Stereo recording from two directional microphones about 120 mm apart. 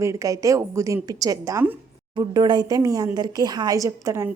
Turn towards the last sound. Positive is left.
turn(degrees=-25)  # may be behind; listen again after turning